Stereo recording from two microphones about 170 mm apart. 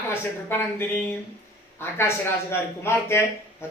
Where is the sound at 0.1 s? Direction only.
15° left (ahead or behind).